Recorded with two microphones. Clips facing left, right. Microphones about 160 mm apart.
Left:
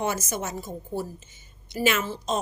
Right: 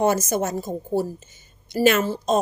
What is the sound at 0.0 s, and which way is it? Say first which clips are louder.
A woman's voice: right 8 dB; 40° right (ahead or behind).